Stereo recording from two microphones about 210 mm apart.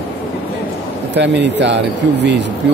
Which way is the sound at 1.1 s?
55° right (ahead or behind).